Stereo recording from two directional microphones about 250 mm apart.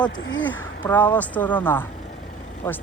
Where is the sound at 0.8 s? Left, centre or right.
Centre.